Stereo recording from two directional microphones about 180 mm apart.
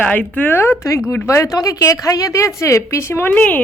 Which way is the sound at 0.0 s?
10° left (ahead or behind).